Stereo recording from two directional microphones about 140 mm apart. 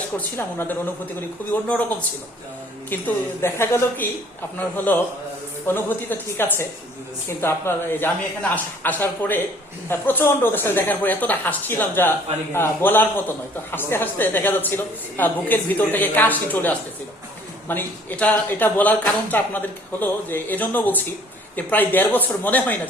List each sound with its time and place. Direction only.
0.2 s a man's voice: 15° left (ahead or behind)